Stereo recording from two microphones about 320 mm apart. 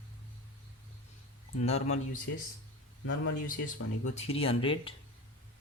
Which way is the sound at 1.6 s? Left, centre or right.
Centre.